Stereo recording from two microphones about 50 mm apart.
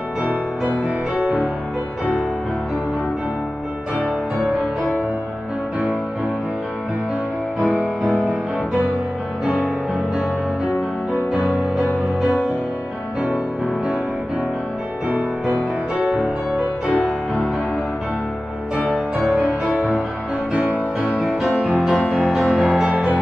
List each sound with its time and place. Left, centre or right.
0.8 s music: right
15.0 s music: right
18.9 s music: centre
19.3 s music: right
21.4 s music: centre
22.8 s music: right